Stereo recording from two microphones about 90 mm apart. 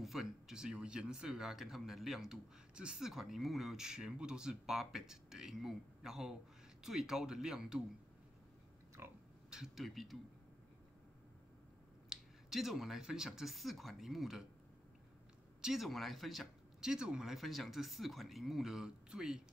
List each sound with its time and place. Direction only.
0.0 s speech: centre (ahead or behind)
9.5 s speech: 5° right (ahead or behind)
12.1 s speech: 5° right (ahead or behind)
15.6 s speech: 5° right (ahead or behind)